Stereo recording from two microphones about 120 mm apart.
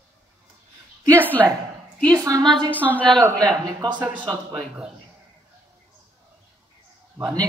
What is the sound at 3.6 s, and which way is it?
Speech, 35° right (ahead or behind).